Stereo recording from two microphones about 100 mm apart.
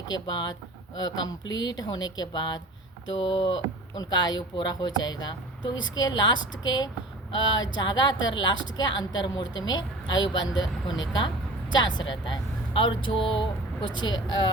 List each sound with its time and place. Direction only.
0.1 s speech: 45° left (ahead or behind)